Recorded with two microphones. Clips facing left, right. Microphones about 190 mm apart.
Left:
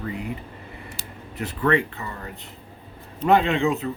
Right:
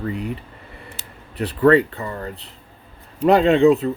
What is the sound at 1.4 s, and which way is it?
Speech, 35° right (ahead or behind).